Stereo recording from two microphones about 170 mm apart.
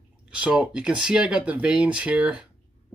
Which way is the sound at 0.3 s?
5° right (ahead or behind).